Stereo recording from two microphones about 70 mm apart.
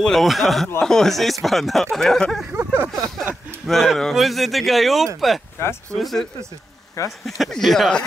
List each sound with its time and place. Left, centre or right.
0.0 s speech: centre
2.5 s a sound: right
3.6 s speech: centre
5.6 s speech: left
5.9 s speech: centre